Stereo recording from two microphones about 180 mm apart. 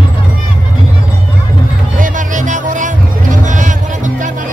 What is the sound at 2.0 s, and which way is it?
Music, 45° right (ahead or behind).